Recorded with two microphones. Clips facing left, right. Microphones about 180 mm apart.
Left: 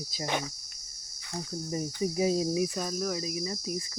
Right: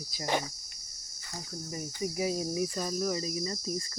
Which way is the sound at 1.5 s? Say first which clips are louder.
Left 6 dB; 30° left (ahead or behind).